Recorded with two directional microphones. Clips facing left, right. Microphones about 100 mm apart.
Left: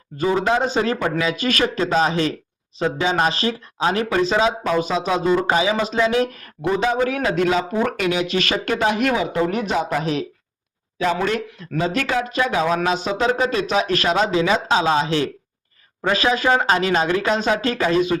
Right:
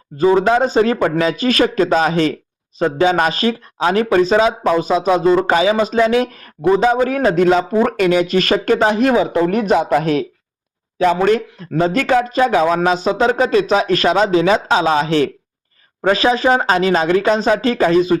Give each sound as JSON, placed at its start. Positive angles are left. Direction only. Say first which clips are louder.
{"t": 0.2, "sound": "speech", "louder": "right 6 dB", "side_deg": -35}
{"t": 0.9, "sound": "speech", "louder": "right 6 dB", "side_deg": -25}
{"t": 1.2, "sound": "speech", "louder": "right 6 dB", "side_deg": -40}
{"t": 9.5, "sound": "speech", "louder": "right 7 dB", "side_deg": -50}
{"t": 16.0, "sound": "speech", "louder": "right 5 dB", "side_deg": -35}